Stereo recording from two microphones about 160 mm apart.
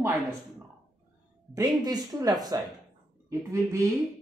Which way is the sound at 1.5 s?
25° right (ahead or behind).